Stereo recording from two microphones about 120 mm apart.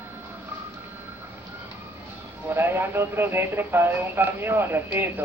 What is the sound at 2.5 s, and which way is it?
Speech, 20° right (ahead or behind).